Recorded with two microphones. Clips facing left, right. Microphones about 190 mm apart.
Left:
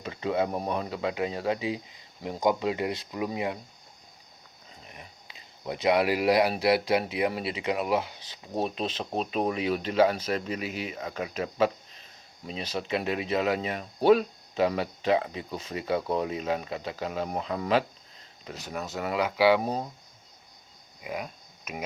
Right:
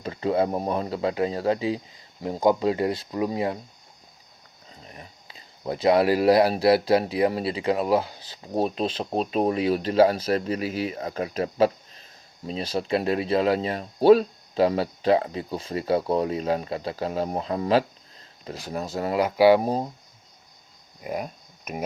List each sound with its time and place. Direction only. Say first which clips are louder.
0.0 s speech: right 4 dB; 35° right (ahead or behind)
4.9 s speech: right 4 dB; 35° right (ahead or behind)
21.0 s speech: right 5 dB; 45° right (ahead or behind)